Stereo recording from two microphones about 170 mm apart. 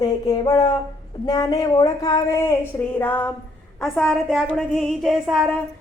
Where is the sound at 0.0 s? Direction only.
20° left (ahead or behind).